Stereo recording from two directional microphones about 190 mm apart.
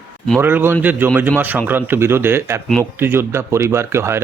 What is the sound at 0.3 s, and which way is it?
Speech, 10° right (ahead or behind).